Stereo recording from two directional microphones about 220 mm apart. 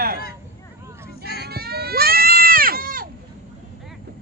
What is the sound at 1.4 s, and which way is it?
Goat, 45° right (ahead or behind).